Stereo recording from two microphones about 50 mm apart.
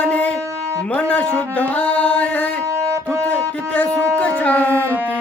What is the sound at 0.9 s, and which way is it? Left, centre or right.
Speech, left.